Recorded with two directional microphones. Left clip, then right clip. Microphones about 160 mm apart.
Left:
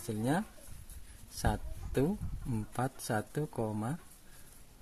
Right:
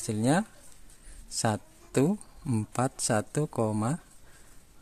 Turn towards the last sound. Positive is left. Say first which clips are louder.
# right 8 dB
turn(degrees=-45)  # may be behind; listen again after turning